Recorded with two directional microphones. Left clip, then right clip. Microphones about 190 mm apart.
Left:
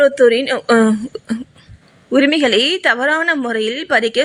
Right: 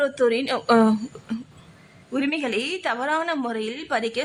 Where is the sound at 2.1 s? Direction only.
25° left (ahead or behind).